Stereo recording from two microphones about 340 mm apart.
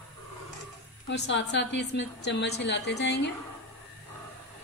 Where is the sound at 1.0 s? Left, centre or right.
Left.